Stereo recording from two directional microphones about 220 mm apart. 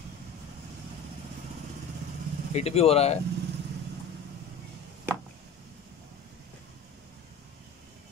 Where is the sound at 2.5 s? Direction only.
30° left (ahead or behind).